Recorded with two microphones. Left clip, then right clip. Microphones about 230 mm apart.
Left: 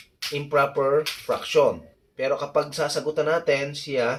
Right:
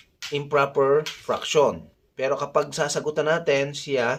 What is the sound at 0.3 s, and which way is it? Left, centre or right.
Speech, right.